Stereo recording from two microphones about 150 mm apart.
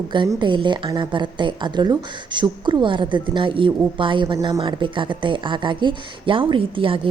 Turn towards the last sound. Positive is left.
turn(degrees=-35)  # may be behind; listen again after turning